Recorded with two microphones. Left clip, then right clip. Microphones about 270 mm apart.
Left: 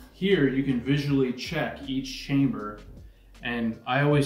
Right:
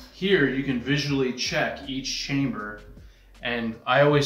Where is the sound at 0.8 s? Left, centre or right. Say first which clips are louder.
Right 2 dB; centre.